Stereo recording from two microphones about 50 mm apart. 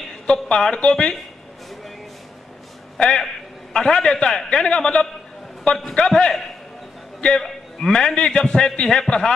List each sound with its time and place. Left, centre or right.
0.3 s a man's voice: centre
3.0 s a man's voice: centre
7.3 s a man's voice: centre